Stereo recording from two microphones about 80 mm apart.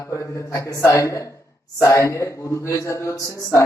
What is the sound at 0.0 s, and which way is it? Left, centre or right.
Speech, left.